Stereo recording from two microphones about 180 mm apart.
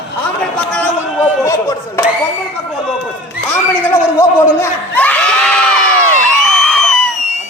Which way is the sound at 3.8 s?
15° left (ahead or behind).